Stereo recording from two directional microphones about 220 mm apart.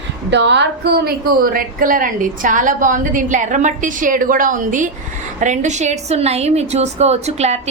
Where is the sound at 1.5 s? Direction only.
40° right (ahead or behind).